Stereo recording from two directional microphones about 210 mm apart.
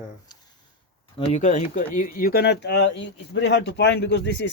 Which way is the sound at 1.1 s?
35° left (ahead or behind).